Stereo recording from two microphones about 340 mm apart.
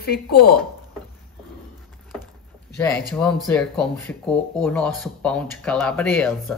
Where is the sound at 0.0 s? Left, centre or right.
Left.